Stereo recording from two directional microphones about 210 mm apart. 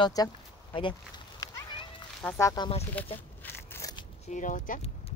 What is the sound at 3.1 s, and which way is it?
Crushing, 10° left (ahead or behind).